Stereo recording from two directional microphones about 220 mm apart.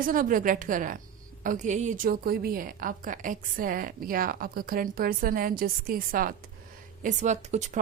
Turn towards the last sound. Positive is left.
turn(degrees=-30)  # may be behind; listen again after turning